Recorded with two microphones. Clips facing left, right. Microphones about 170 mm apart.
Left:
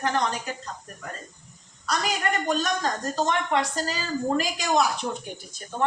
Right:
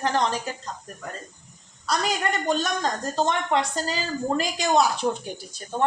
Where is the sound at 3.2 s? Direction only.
30° right (ahead or behind).